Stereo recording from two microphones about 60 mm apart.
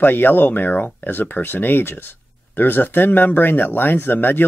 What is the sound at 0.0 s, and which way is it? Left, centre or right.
Speech, left.